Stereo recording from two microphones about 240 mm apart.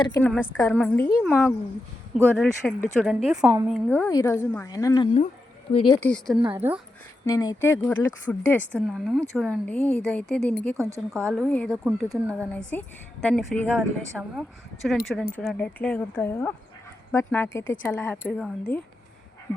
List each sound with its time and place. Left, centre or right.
0.2 s a woman's voice: centre
4.0 s a woman's voice: centre
6.0 s speech: centre
7.3 s a woman's voice: centre
10.8 s speech: centre
11.1 s a woman's voice: centre